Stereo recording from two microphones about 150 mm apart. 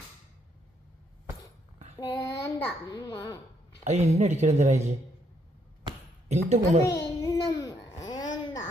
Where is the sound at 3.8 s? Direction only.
45° right (ahead or behind).